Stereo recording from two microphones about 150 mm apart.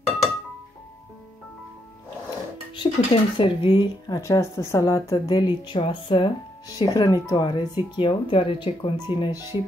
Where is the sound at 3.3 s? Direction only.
35° left (ahead or behind).